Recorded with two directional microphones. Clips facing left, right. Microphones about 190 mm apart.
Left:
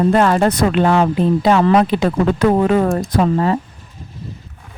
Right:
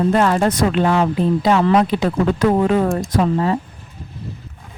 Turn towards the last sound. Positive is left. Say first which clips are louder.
# left 2 dB
turn(degrees=60)  # may be behind; listen again after turning